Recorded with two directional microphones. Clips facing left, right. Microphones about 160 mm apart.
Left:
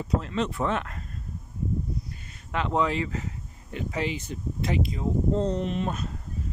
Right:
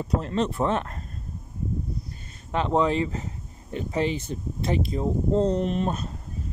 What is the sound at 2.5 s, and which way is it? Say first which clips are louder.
Speech: right 3 dB; 25° right (ahead or behind).